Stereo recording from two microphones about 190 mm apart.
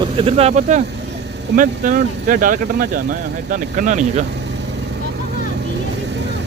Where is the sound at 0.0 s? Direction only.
30° right (ahead or behind).